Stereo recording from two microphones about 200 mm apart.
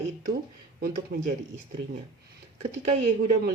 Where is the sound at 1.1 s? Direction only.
45° right (ahead or behind).